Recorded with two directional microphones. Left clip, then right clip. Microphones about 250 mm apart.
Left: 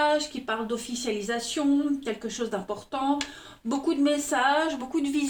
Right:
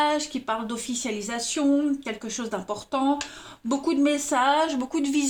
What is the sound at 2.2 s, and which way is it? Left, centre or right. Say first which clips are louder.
A woman's voice: right 2 dB; right.